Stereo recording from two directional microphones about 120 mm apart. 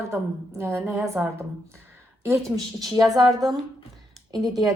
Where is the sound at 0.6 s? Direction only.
20° right (ahead or behind).